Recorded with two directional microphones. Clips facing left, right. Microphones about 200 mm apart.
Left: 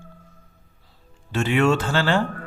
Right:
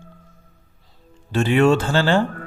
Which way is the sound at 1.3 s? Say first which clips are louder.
Right 4 dB; 35° right (ahead or behind).